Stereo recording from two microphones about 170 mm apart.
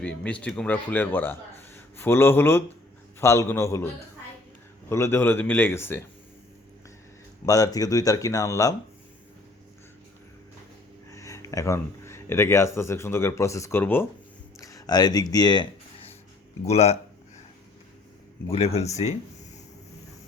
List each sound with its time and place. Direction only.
0.0 s a man's voice: 5° left (ahead or behind)
4.9 s a man's voice: 15° left (ahead or behind)
7.4 s speech: 20° left (ahead or behind)
11.1 s speech: 20° left (ahead or behind)
14.6 s a sound: 20° left (ahead or behind)
16.6 s a sound: 40° left (ahead or behind)
18.5 s speech: 35° left (ahead or behind)